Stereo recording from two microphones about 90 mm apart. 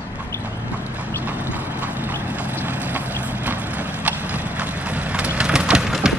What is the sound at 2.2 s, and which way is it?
Boat, 20° right (ahead or behind).